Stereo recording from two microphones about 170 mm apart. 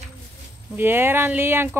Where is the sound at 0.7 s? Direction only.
10° right (ahead or behind).